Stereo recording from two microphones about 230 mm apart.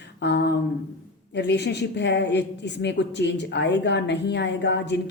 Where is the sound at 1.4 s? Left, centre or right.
Left.